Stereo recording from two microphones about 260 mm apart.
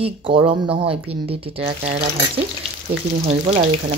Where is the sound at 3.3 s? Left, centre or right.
Right.